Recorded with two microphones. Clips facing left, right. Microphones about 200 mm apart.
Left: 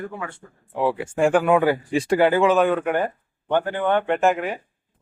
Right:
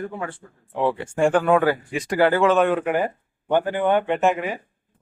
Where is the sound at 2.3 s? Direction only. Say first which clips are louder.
Right 2 dB; 15° left (ahead or behind).